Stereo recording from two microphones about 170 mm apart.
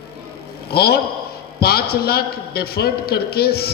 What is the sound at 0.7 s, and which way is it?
A man's voice, 65° left (ahead or behind).